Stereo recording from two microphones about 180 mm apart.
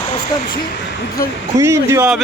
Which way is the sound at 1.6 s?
15° right (ahead or behind).